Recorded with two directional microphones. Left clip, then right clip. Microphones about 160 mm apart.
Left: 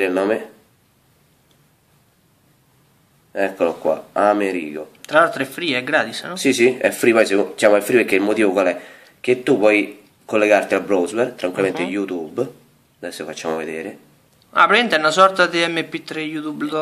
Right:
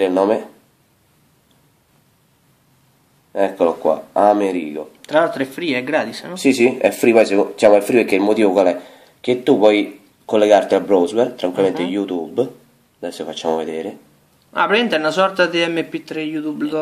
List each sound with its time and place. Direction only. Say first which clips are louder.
0.0 s speech: right 3 dB; 20° right (ahead or behind)
3.3 s speech: right 3 dB; 20° right (ahead or behind)
5.0 s a man's voice: left 1 dB; centre (ahead or behind)
6.3 s speech: right 1 dB; 20° right (ahead or behind)
14.5 s a man's voice: left 2 dB; centre (ahead or behind)